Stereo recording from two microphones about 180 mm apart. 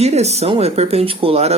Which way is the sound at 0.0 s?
35° right (ahead or behind).